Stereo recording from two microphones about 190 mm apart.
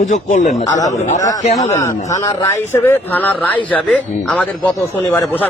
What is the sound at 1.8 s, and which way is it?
Speech, 15° left (ahead or behind).